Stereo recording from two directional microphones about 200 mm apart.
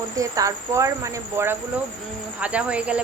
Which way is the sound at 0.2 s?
15° right (ahead or behind).